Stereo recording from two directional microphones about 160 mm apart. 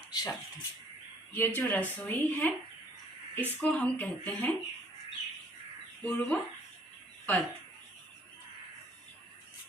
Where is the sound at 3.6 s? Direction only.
10° left (ahead or behind).